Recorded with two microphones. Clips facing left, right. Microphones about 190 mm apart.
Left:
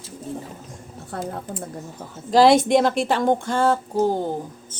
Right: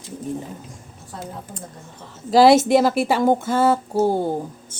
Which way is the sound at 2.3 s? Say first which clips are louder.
Right 2 dB; 5° right (ahead or behind).